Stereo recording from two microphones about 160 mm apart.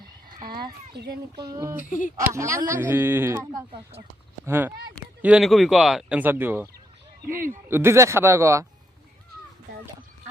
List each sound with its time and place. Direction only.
0.5 s speech: 75° right (ahead or behind)
1.4 s speech: 20° right (ahead or behind)
1.7 s speech: 60° left (ahead or behind)
2.1 s speech: 20° right (ahead or behind)
7.3 s speech: 60° right (ahead or behind)
7.7 s speech: 15° right (ahead or behind)